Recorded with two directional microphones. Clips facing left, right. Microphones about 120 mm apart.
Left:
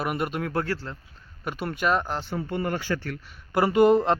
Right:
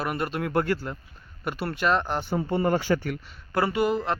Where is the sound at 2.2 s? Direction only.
25° right (ahead or behind).